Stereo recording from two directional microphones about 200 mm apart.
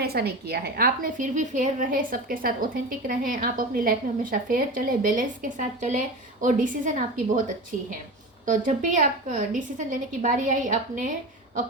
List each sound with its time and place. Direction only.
0.0 s a woman's voice: 50° right (ahead or behind)
8.4 s a woman's voice: 40° right (ahead or behind)